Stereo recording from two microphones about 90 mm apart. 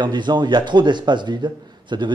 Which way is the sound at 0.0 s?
55° right (ahead or behind).